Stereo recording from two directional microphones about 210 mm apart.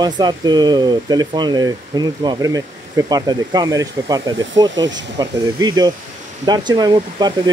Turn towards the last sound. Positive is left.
turn(degrees=-20)  # may be behind; listen again after turning